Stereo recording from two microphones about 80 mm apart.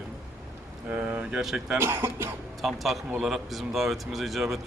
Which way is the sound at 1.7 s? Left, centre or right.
Right.